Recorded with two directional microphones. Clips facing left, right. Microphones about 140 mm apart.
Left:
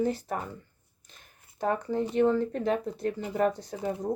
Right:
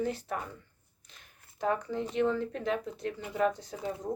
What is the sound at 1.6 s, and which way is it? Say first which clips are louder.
Speech: left 3 dB; 40° left (ahead or behind).